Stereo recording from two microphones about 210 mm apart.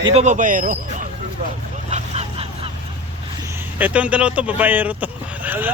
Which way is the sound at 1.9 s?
30° right (ahead or behind).